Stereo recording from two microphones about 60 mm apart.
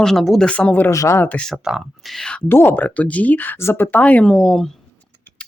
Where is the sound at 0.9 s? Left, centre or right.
Left.